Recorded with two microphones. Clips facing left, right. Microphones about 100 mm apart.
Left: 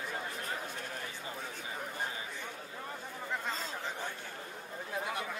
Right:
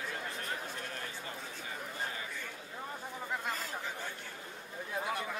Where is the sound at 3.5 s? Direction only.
20° left (ahead or behind).